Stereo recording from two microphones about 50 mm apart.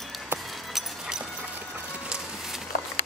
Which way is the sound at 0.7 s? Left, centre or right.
Centre.